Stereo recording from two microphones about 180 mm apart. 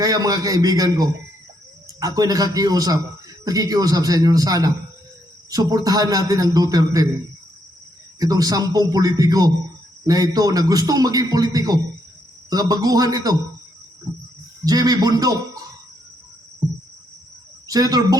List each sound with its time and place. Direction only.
0.0 s a man's voice: 20° right (ahead or behind)
8.2 s a man's voice: 20° right (ahead or behind)
14.6 s a man's voice: 20° right (ahead or behind)
17.7 s a man's voice: 20° right (ahead or behind)